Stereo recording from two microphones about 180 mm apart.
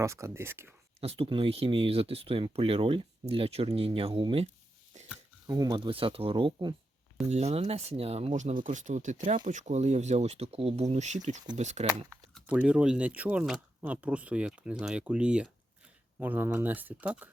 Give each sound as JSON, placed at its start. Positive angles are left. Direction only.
{"t": 0.0, "sound": "speech", "side_deg": -15}
{"t": 1.0, "sound": "speech", "side_deg": -35}
{"t": 5.5, "sound": "speech", "side_deg": -20}
{"t": 7.3, "sound": "speech", "side_deg": -35}
{"t": 12.3, "sound": "speech", "side_deg": -5}